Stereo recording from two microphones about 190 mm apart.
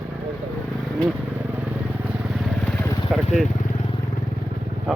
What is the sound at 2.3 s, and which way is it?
Motorcycle, centre (ahead or behind).